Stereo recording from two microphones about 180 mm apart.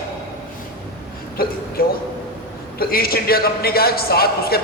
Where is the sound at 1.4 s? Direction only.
55° left (ahead or behind).